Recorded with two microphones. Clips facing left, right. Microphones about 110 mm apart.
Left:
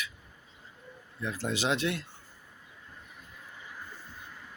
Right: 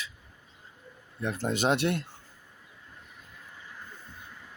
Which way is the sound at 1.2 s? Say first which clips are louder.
Right 3 dB; 60° right (ahead or behind).